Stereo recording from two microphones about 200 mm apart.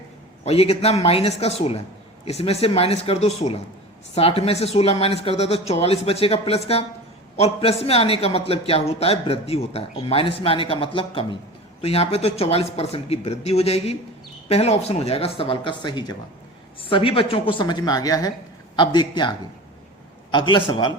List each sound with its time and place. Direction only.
0.4 s a man's voice: 30° left (ahead or behind)
20.3 s a man's voice: 25° left (ahead or behind)